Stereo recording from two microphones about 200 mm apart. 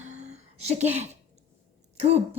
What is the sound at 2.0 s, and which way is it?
Speech, 30° right (ahead or behind).